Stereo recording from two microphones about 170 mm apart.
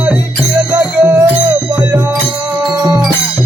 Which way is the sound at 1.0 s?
10° right (ahead or behind).